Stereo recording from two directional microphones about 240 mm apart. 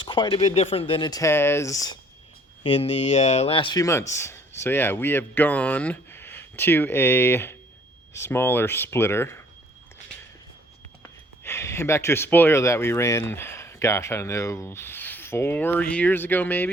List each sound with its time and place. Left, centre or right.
0.0 s speech: centre
11.4 s speech: centre